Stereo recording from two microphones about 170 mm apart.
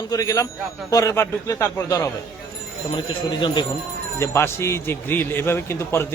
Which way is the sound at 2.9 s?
30° left (ahead or behind).